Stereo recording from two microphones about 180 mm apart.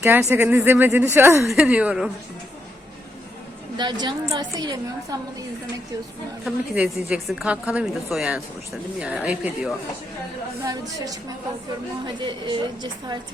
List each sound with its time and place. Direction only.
0.0 s speech: 15° right (ahead or behind)
3.8 s a woman's voice: 25° right (ahead or behind)
6.4 s a woman's voice: 5° right (ahead or behind)
10.6 s a woman's voice: 20° right (ahead or behind)